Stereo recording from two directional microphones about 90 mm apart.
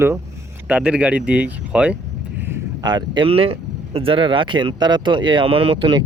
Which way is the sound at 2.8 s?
55° right (ahead or behind).